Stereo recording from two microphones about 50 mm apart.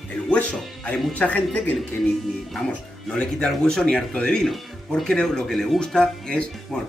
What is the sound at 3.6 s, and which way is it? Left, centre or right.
Speech, centre.